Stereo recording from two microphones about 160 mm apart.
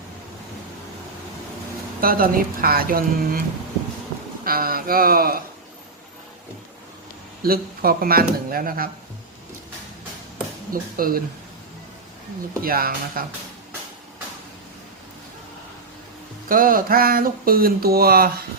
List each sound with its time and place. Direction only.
2.0 s speech: 65° right (ahead or behind)
4.4 s speech: 65° right (ahead or behind)
7.4 s speech: 70° right (ahead or behind)
10.7 s speech: 65° right (ahead or behind)
12.6 s speech: 65° right (ahead or behind)
16.5 s speech: 60° right (ahead or behind)